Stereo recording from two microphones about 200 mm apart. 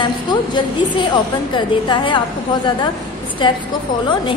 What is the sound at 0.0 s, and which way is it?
A woman's voice, 20° left (ahead or behind).